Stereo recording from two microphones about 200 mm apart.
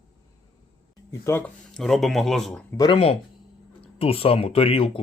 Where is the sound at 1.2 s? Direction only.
10° left (ahead or behind).